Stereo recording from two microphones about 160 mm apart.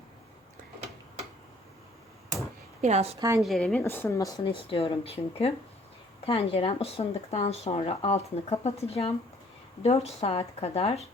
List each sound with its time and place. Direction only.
2.8 s a woman's voice: 45° right (ahead or behind)
3.2 s a woman's voice: 20° right (ahead or behind)
3.4 s speech: 5° left (ahead or behind); by 11.0 s 40° left (ahead or behind)